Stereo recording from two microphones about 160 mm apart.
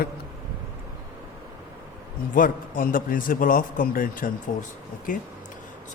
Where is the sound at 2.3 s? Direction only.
60° left (ahead or behind).